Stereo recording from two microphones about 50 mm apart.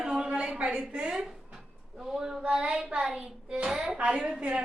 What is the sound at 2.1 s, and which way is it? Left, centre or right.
A woman's voice, centre.